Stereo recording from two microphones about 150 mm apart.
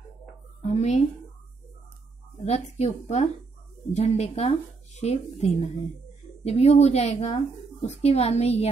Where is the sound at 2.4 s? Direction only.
45° left (ahead or behind).